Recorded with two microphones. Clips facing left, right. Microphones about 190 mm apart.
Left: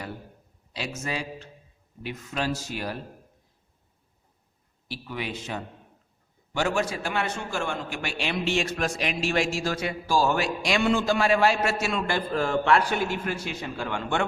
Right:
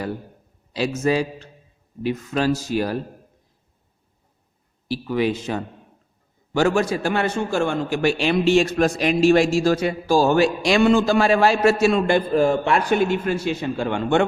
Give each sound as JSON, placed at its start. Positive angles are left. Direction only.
{"t": 0.7, "sound": "a man's voice", "side_deg": -40}
{"t": 4.9, "sound": "a man's voice", "side_deg": -40}
{"t": 12.0, "sound": "a man's voice", "side_deg": -20}